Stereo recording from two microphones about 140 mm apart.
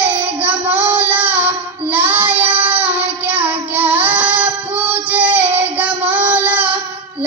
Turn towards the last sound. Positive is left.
turn(degrees=-10)  # may be behind; listen again after turning